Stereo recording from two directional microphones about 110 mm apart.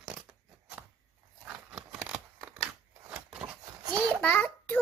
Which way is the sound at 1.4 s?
10° right (ahead or behind).